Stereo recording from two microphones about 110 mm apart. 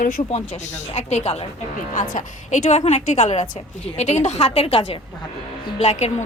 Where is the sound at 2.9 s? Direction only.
90° left; by 4.9 s 65° left (ahead or behind).